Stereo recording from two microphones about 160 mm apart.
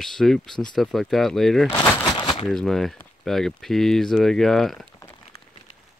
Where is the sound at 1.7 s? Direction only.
10° left (ahead or behind).